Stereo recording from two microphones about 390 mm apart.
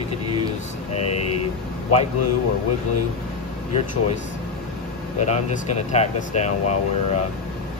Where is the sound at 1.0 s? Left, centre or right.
Left.